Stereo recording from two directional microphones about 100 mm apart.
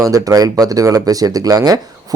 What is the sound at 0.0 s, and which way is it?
Speech, 35° right (ahead or behind).